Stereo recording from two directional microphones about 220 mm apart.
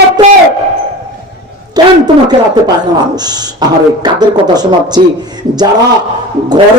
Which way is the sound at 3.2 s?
20° right (ahead or behind).